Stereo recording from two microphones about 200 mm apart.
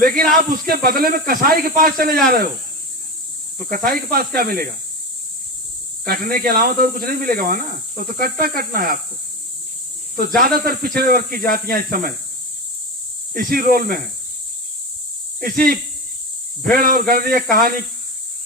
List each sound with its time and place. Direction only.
0.0 s speech: 45° right (ahead or behind)
3.6 s speech: 45° right (ahead or behind)
6.1 s speech: 45° right (ahead or behind)
10.2 s speech: 45° right (ahead or behind)
13.3 s speech: 45° right (ahead or behind)
15.4 s speech: 45° right (ahead or behind)